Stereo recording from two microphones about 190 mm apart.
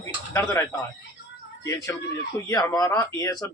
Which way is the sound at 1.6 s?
15° left (ahead or behind).